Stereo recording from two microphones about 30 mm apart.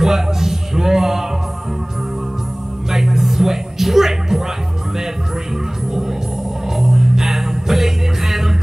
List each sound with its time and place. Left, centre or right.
0.0 s a sound: centre
2.9 s music: centre
6.8 s music: centre